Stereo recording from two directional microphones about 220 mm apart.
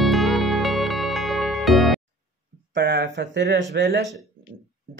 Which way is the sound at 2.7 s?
50° right (ahead or behind).